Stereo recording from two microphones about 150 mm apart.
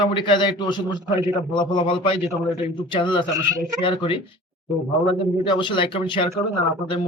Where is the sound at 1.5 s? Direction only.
30° left (ahead or behind).